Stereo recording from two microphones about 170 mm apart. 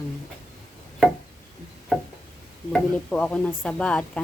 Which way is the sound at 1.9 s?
Centre (ahead or behind).